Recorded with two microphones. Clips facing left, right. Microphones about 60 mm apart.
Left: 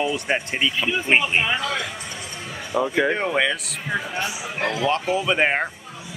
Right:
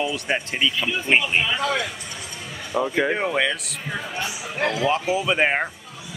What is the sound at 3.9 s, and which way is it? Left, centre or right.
Speech, left.